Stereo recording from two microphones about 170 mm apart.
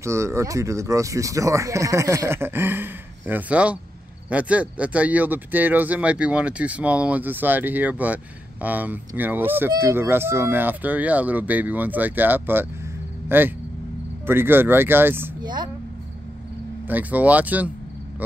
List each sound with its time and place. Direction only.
0.0 s speech: 15° right (ahead or behind)
15.4 s a woman's voice: 25° right (ahead or behind)
16.8 s speech: 10° right (ahead or behind)